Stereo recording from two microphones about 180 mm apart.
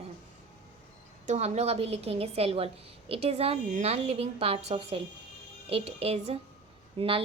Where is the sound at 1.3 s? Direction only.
35° right (ahead or behind).